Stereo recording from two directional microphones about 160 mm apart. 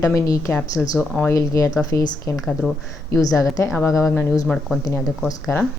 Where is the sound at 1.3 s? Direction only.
20° left (ahead or behind); by 4.8 s 5° left (ahead or behind).